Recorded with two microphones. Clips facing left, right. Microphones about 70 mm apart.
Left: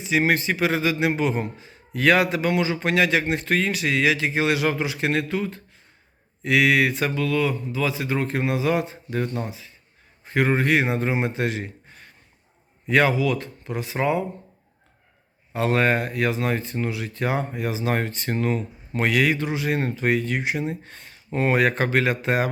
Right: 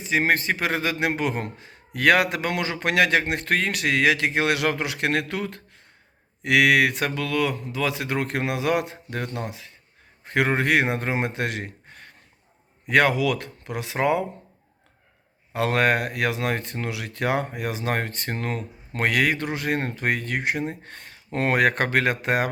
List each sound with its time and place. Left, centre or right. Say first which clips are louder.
0.0 s a man's voice: left 1 dB; right
15.5 s a man's voice: even; right